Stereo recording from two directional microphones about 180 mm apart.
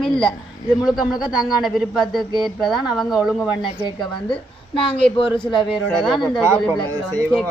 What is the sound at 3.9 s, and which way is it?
A woman's voice, 30° left (ahead or behind).